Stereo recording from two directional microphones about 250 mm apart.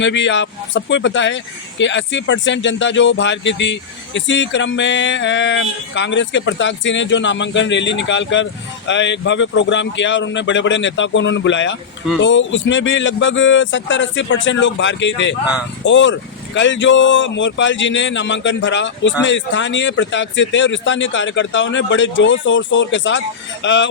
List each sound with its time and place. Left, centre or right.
0.0 s speech: left